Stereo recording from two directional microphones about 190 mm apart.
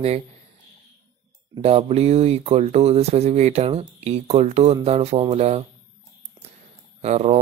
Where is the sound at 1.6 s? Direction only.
30° right (ahead or behind).